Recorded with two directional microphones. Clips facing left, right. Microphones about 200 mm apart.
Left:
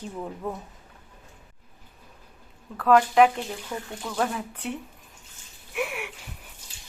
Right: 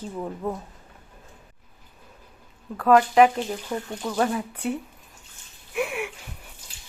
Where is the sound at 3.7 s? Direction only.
30° right (ahead or behind).